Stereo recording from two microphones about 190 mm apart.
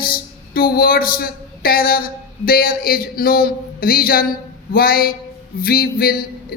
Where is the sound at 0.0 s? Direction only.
50° left (ahead or behind).